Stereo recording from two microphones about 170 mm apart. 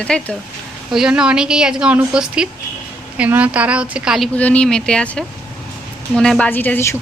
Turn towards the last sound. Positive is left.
turn(degrees=15)  # may be behind; listen again after turning